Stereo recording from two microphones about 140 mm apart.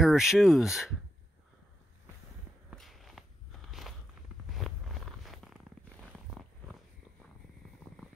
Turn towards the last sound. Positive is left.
turn(degrees=-5)  # may be behind; listen again after turning